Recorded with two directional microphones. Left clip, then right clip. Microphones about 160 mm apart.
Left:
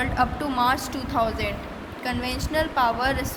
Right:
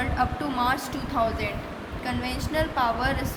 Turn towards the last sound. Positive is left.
turn(degrees=40)  # may be behind; listen again after turning